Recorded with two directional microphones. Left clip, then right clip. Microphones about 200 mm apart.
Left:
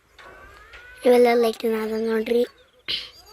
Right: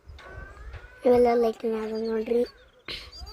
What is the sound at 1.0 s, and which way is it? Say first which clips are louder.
Speech: left 4 dB; centre (ahead or behind).